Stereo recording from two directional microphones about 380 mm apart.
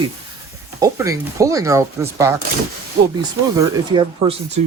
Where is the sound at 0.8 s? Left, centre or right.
Centre.